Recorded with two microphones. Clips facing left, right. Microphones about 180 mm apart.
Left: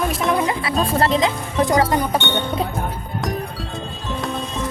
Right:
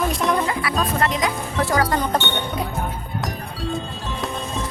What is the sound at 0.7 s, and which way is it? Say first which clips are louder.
Music: left 6 dB; 30° left (ahead or behind).